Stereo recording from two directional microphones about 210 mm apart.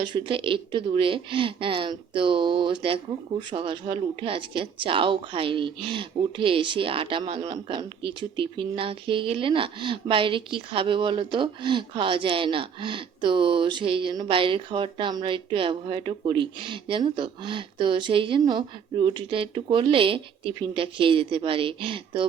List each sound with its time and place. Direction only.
0.0 s speech: 20° right (ahead or behind)